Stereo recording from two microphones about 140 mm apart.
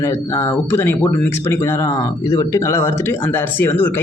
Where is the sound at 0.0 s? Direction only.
20° left (ahead or behind).